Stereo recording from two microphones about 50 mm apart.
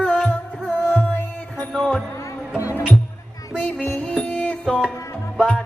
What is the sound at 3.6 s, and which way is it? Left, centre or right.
Music, centre.